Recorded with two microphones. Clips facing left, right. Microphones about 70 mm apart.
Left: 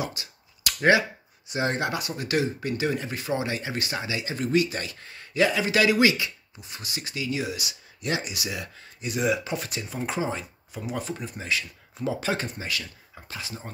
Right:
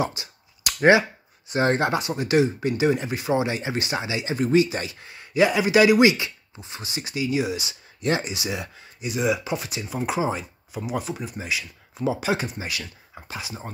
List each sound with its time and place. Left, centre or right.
0.0 s a sound: right
1.5 s speech: right
9.0 s speech: centre